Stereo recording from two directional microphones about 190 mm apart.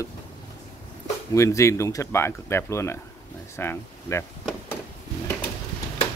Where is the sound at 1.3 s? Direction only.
15° left (ahead or behind).